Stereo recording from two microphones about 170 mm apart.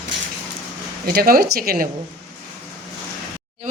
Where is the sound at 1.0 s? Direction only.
60° right (ahead or behind).